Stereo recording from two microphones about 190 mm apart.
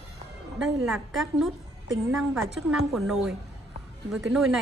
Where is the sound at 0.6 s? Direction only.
Centre (ahead or behind).